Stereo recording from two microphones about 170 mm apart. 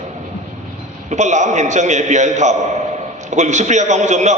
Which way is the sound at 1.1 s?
45° right (ahead or behind).